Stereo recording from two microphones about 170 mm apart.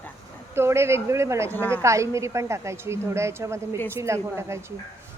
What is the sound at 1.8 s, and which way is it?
A woman's voice, 15° right (ahead or behind).